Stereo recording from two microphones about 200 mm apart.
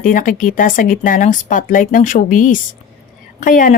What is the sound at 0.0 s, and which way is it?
A woman's voice, 40° left (ahead or behind).